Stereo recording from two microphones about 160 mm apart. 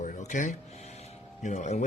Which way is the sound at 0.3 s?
50° left (ahead or behind).